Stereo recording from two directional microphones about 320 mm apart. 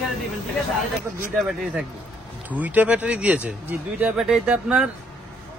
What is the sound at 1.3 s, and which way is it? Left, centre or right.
Speech, centre.